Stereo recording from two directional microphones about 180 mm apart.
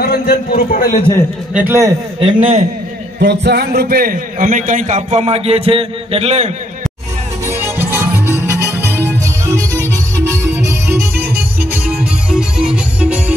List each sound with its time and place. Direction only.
0.0 s a man's voice: 55° left (ahead or behind)
1.5 s a man's voice: 15° right (ahead or behind)
2.1 s a man's voice: 30° right (ahead or behind)
3.2 s a man's voice: 65° right (ahead or behind); by 6.5 s 35° right (ahead or behind)
7.4 s music: 15° right (ahead or behind)